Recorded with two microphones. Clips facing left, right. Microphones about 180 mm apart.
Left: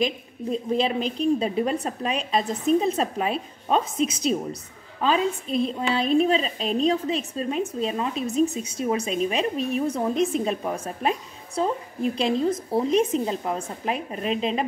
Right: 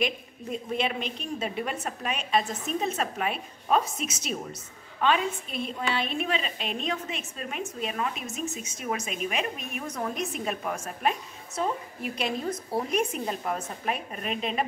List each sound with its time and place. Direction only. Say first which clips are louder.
0.0 s a woman's voice: left 4 dB; 30° left (ahead or behind)
5.7 s a woman's voice: left 5 dB; 35° left (ahead or behind)